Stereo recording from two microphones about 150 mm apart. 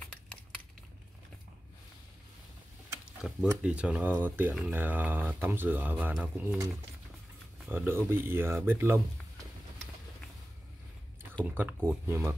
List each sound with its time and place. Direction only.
3.1 s tick-tock: 5° right (ahead or behind)
3.6 s speech: 5° right (ahead or behind)
7.7 s speech: 15° right (ahead or behind)
11.4 s speech: 10° right (ahead or behind)